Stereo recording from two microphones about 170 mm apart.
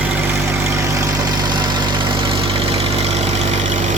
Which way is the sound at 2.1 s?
30° right (ahead or behind).